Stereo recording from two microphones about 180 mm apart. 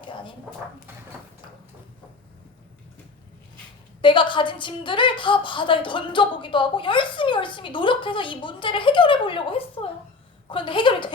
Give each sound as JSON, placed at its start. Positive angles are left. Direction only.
{"t": 4.0, "sound": "a woman's voice", "side_deg": 25}